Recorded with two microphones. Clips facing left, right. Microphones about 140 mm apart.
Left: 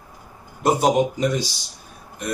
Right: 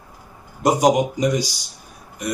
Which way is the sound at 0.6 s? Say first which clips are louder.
Right 2 dB; 15° right (ahead or behind).